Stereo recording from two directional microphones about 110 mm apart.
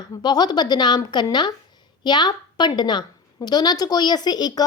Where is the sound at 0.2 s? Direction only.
40° left (ahead or behind).